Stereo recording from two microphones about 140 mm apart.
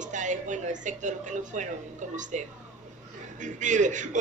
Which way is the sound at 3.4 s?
60° right (ahead or behind).